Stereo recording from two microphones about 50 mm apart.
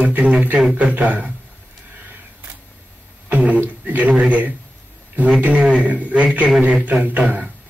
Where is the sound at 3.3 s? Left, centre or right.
Right.